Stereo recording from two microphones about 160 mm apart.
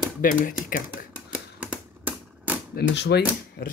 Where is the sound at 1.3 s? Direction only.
10° right (ahead or behind).